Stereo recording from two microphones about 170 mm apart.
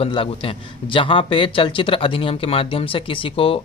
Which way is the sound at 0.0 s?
30° left (ahead or behind).